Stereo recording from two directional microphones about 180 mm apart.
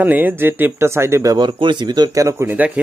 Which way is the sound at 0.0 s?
10° right (ahead or behind).